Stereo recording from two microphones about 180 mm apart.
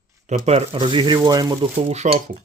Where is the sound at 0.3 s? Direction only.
35° right (ahead or behind).